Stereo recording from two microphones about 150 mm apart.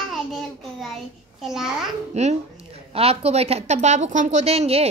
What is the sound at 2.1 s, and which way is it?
A woman's voice, 50° right (ahead or behind).